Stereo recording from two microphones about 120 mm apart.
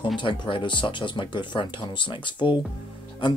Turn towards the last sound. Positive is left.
turn(degrees=45)  # may be behind; listen again after turning